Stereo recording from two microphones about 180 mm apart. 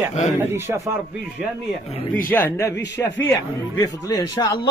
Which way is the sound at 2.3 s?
15° left (ahead or behind).